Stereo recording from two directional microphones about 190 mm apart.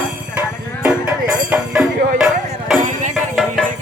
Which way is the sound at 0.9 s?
5° right (ahead or behind).